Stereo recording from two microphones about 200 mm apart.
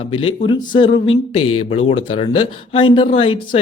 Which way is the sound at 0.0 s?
25° left (ahead or behind).